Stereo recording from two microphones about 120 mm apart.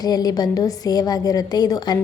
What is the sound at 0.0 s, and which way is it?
A woman's voice, 35° left (ahead or behind).